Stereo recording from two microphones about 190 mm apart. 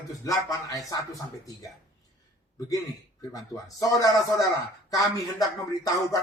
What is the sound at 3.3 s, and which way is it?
Speech, 20° left (ahead or behind).